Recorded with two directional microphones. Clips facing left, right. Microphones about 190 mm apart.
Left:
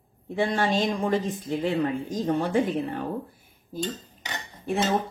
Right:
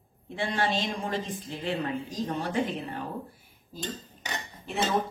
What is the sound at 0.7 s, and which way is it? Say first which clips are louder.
Speech: left 6 dB; 45° left (ahead or behind).